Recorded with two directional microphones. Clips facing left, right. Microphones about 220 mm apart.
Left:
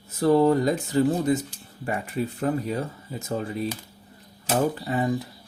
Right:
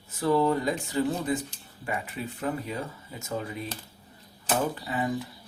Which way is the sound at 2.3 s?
40° left (ahead or behind).